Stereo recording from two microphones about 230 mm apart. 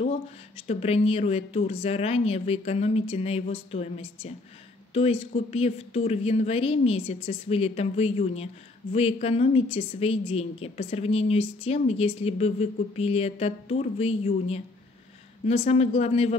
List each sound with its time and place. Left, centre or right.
0.6 s a woman's voice: left